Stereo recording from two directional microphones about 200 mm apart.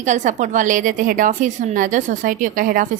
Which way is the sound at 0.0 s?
40° right (ahead or behind).